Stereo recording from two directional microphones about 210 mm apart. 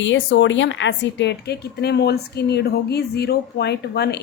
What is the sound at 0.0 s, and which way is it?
A woman's voice, 60° left (ahead or behind).